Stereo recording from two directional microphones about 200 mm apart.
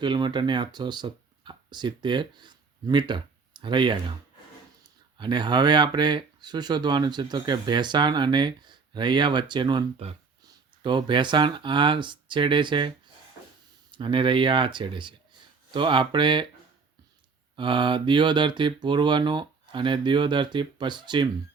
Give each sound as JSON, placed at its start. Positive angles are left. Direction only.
{"t": 0.0, "sound": "speech", "side_deg": -20}
{"t": 13.9, "sound": "speech", "side_deg": -25}
{"t": 17.6, "sound": "speech", "side_deg": -25}